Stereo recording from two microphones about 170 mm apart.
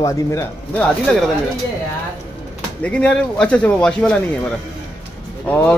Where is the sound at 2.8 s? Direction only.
5° left (ahead or behind).